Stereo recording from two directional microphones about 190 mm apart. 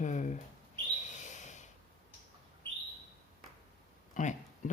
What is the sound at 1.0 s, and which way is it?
Bird, 40° left (ahead or behind).